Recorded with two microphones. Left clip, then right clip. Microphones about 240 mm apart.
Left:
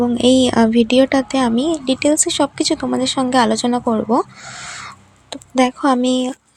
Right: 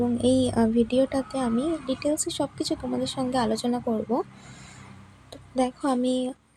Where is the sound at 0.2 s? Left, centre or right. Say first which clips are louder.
Left 11 dB; left.